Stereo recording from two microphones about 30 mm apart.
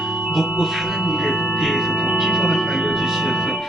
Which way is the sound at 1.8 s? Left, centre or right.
Centre.